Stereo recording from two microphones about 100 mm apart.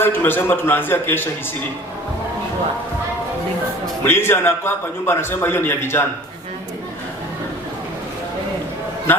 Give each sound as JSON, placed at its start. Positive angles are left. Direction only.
{"t": 0.0, "sound": "a man's voice", "side_deg": 20}
{"t": 4.0, "sound": "a man's voice", "side_deg": 25}